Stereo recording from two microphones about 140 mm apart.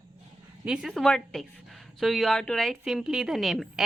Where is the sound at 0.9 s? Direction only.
5° left (ahead or behind).